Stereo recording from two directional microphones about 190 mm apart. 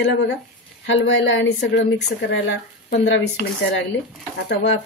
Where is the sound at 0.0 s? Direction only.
65° left (ahead or behind).